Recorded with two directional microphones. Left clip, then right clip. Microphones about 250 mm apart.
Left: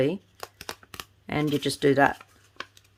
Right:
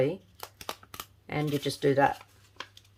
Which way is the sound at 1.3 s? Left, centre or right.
Left.